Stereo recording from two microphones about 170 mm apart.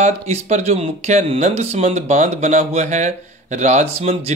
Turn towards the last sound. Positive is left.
turn(degrees=-40)  # may be behind; listen again after turning